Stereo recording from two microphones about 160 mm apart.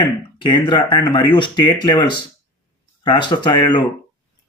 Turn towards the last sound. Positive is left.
turn(degrees=30)  # may be behind; listen again after turning